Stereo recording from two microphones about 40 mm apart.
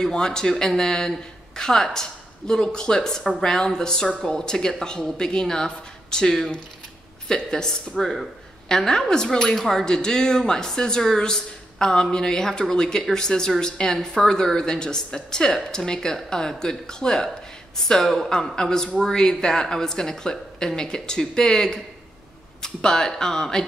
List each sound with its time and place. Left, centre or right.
0.1 s speech: centre
8.0 s speech: centre
8.6 s speech: centre